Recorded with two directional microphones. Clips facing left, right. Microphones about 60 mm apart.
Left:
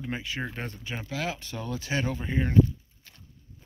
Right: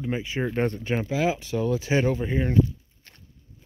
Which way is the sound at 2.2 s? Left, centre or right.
Centre.